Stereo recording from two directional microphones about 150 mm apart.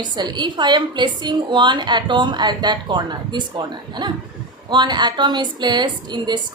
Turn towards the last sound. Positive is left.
turn(degrees=-30)  # may be behind; listen again after turning